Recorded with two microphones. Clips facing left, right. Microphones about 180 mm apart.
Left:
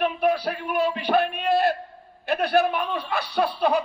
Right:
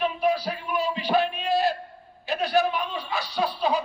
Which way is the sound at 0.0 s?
60° left (ahead or behind).